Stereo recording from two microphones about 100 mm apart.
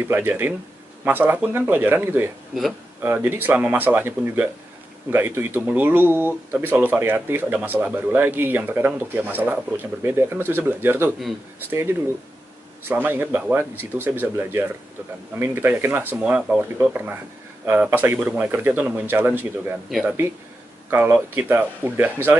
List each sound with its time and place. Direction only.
0.1 s speech: 20° right (ahead or behind)
16.2 s speech: 10° right (ahead or behind)
19.9 s speech: centre (ahead or behind)
20.9 s speech: 20° right (ahead or behind)